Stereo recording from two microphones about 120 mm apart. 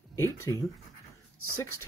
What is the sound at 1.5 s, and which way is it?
Speech, 25° left (ahead or behind).